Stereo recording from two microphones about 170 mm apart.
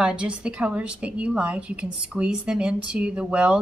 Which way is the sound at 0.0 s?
5° right (ahead or behind).